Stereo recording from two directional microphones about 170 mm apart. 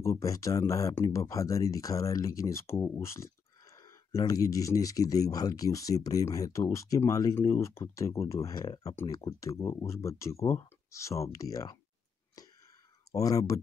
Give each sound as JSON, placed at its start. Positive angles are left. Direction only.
{"t": 0.0, "sound": "speech", "side_deg": 20}
{"t": 13.1, "sound": "speech", "side_deg": 20}